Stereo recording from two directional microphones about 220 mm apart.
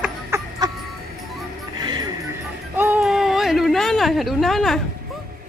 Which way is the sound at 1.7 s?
20° right (ahead or behind).